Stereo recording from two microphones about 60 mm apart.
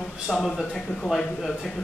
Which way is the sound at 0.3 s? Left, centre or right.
Centre.